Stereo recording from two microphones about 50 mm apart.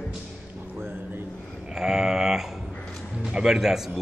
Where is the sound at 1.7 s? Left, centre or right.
Centre.